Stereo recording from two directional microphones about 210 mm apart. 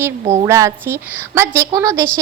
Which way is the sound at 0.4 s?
15° right (ahead or behind).